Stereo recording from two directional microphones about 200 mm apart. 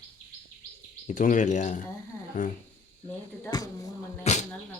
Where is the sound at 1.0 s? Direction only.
40° left (ahead or behind).